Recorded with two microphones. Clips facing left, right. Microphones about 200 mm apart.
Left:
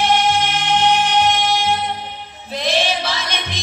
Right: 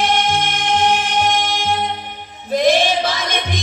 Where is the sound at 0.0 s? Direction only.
50° right (ahead or behind).